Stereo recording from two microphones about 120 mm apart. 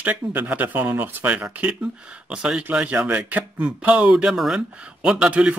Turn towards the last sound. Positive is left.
turn(degrees=-10)  # may be behind; listen again after turning